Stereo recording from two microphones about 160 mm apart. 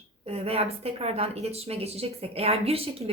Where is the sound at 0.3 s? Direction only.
40° right (ahead or behind).